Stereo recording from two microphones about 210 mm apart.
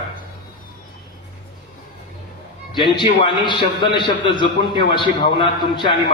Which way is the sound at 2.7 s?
20° left (ahead or behind).